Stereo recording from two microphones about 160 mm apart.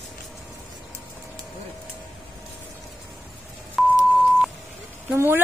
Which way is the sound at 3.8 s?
Centre (ahead or behind).